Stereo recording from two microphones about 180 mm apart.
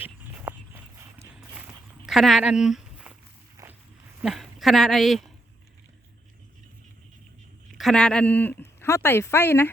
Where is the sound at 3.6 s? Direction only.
20° right (ahead or behind).